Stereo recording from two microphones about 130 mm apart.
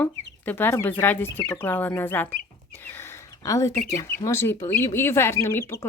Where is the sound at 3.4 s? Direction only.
25° left (ahead or behind).